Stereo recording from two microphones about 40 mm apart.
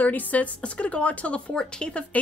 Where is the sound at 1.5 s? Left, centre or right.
Left.